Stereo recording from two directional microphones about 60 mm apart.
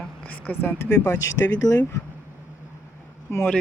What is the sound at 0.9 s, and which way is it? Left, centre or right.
Speech, left.